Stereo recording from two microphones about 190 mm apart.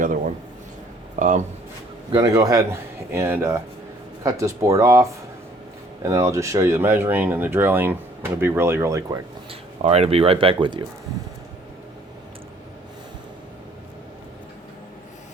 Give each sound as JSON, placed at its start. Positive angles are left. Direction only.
{"t": 1.1, "sound": "speech", "side_deg": -40}
{"t": 2.1, "sound": "speech", "side_deg": -20}
{"t": 9.5, "sound": "speech", "side_deg": -30}